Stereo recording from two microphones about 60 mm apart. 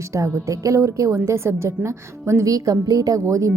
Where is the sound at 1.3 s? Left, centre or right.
Right.